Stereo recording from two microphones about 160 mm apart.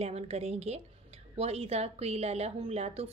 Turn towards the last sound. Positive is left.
turn(degrees=-40)  # may be behind; listen again after turning